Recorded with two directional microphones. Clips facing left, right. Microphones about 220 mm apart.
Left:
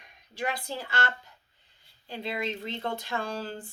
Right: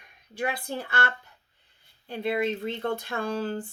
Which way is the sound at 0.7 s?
55° right (ahead or behind).